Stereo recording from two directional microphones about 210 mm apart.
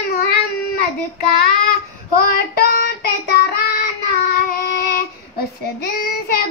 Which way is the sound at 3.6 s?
50° left (ahead or behind).